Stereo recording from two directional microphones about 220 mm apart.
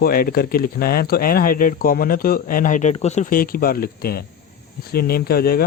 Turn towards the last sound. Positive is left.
turn(degrees=45)  # may be behind; listen again after turning